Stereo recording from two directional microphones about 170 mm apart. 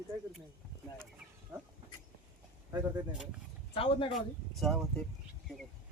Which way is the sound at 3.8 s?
30° left (ahead or behind).